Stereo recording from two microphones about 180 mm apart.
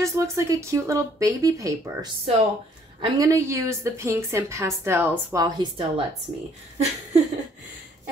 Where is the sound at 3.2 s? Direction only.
15° right (ahead or behind).